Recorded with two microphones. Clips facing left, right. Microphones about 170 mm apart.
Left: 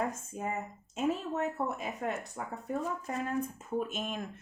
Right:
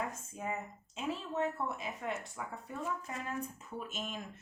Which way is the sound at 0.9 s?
45° left (ahead or behind).